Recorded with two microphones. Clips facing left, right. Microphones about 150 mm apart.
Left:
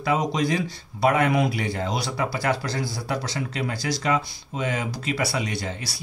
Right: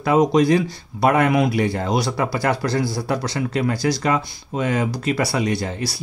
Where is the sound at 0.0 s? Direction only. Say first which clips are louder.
Right 8 dB; 55° right (ahead or behind).